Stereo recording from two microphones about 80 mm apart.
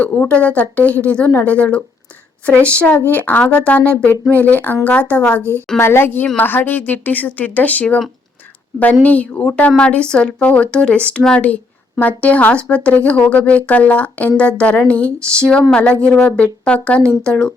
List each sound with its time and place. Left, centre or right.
0.0 s speech: centre
2.8 s a woman's voice: left
9.0 s speech: centre